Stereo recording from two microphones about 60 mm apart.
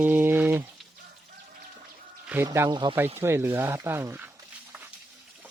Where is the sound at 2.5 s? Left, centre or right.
Right.